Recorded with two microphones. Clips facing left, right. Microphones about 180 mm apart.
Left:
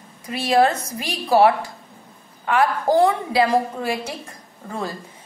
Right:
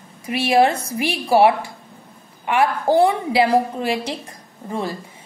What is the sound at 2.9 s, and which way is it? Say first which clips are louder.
A woman's voice: right 1 dB; 15° right (ahead or behind).